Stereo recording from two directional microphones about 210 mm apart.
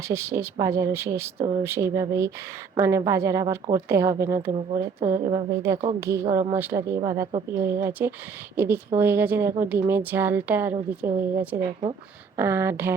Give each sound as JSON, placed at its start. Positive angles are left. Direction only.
{"t": 0.1, "sound": "a woman's voice", "side_deg": -15}
{"t": 11.6, "sound": "speech", "side_deg": -25}
{"t": 12.4, "sound": "a woman's voice", "side_deg": -10}